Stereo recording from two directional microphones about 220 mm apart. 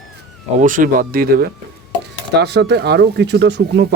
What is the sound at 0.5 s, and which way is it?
Speech, 35° right (ahead or behind).